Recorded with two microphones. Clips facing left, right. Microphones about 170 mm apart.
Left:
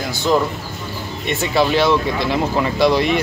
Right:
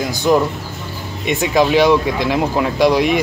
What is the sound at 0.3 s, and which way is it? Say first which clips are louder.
Speech: right 3 dB; 10° right (ahead or behind).